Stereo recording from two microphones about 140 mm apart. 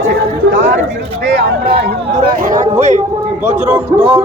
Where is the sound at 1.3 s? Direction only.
90° right.